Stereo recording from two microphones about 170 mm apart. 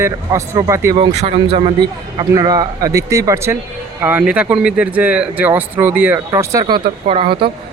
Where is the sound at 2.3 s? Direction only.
20° right (ahead or behind).